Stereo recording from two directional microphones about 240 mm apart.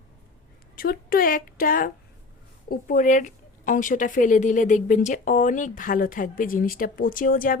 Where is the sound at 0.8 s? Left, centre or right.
Left.